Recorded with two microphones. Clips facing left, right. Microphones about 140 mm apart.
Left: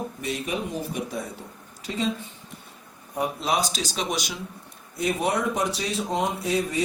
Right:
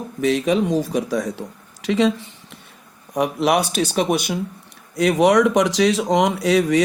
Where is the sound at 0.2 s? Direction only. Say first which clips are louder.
Right 14 dB; 90° right.